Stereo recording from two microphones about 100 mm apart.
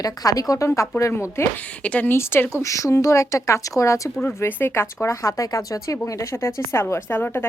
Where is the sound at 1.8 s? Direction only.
15° left (ahead or behind).